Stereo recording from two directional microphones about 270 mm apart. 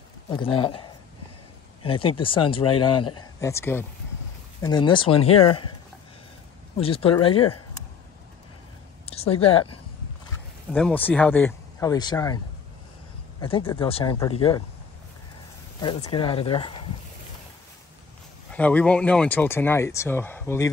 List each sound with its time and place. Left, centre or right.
0.3 s speech: centre
6.8 s speech: left
9.0 s a woman's voice: left
10.7 s speech: centre
13.4 s speech: centre
15.8 s speech: centre
18.5 s speech: centre